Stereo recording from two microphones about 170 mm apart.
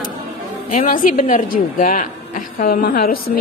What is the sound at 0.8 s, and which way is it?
A woman's voice, 50° left (ahead or behind).